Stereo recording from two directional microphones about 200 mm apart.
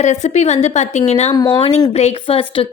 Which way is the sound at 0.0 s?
35° left (ahead or behind).